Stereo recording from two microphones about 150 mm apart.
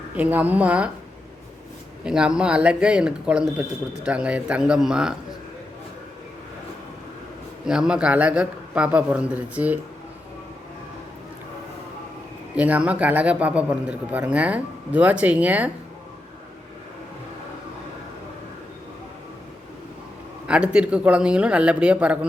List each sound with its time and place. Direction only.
0.2 s a man's voice: 10° right (ahead or behind)
2.0 s speech: 5° right (ahead or behind)
7.7 s a man's voice: 5° right (ahead or behind)
12.5 s a man's voice: 10° right (ahead or behind)
20.5 s a man's voice: 5° right (ahead or behind)